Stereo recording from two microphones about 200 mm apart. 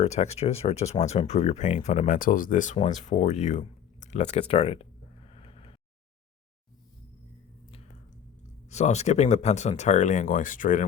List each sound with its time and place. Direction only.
0.0 s speech: 35° left (ahead or behind)
2.7 s a sound: 35° left (ahead or behind)
8.7 s speech: 35° left (ahead or behind)